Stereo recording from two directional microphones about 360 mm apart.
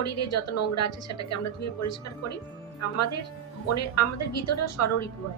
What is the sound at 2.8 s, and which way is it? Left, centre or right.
A woman's voice, left.